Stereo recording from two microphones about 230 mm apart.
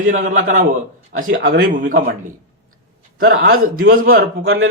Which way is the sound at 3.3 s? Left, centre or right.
Right.